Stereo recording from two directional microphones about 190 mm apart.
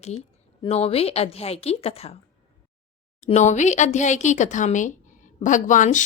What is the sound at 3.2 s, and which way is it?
Speech, 40° left (ahead or behind).